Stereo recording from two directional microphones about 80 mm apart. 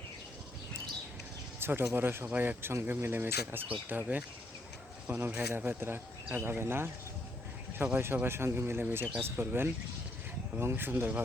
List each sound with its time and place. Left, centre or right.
1.5 s speech: right
2.6 s speech: right